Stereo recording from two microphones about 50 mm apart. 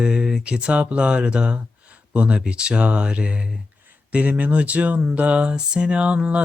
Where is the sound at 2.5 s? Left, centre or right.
Right.